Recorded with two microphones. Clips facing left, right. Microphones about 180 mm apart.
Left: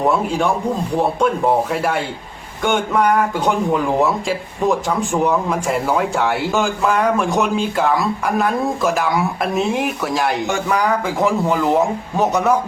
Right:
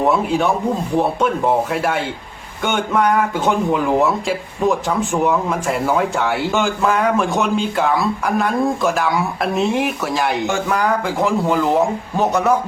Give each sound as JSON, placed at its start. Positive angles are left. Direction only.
{"t": 1.7, "sound": "speech", "side_deg": 0}